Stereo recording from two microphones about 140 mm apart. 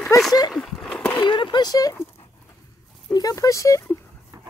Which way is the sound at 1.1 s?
35° left (ahead or behind).